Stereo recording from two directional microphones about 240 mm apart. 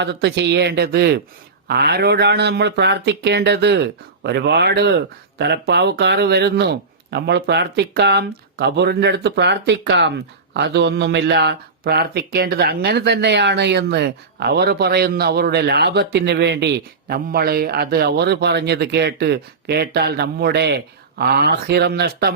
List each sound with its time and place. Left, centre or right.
0.0 s speech: right